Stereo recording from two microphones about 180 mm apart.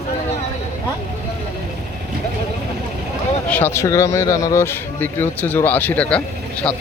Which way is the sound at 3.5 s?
10° left (ahead or behind).